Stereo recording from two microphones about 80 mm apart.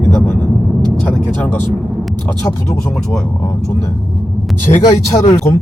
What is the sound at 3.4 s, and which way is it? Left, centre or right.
Speech, left.